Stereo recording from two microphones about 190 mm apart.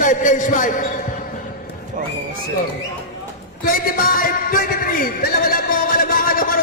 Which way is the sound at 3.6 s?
50° left (ahead or behind).